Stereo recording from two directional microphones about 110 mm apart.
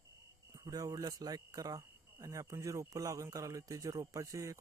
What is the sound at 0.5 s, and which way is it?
A man's voice, 35° right (ahead or behind).